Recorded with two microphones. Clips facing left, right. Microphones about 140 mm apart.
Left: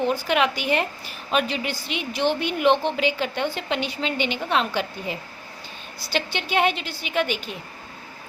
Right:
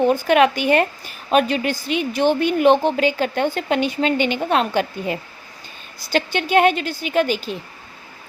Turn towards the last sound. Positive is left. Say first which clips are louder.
# right 6 dB
turn(degrees=-40)  # may be behind; listen again after turning